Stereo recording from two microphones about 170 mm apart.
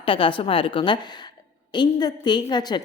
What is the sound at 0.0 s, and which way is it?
A woman's voice, 30° left (ahead or behind).